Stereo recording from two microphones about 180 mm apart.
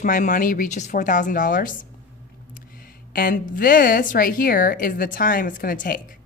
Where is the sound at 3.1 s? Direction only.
50° left (ahead or behind).